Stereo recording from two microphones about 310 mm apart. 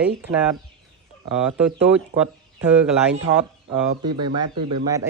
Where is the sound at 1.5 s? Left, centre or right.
Centre.